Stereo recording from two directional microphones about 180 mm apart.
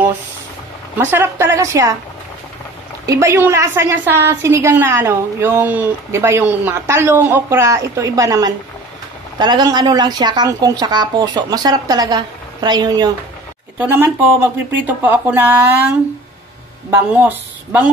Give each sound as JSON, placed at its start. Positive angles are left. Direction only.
{"t": 0.9, "sound": "a woman's voice", "side_deg": -10}
{"t": 3.1, "sound": "a woman's voice", "side_deg": -15}
{"t": 16.9, "sound": "a woman's voice", "side_deg": -10}